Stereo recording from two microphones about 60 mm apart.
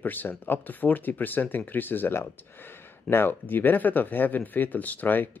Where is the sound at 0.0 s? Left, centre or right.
Left.